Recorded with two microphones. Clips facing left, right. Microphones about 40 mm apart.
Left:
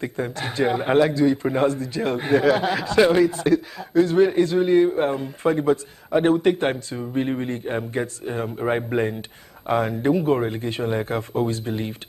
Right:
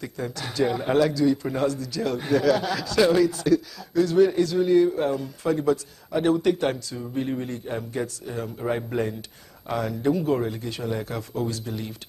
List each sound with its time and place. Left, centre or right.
0.0 s a man's voice: left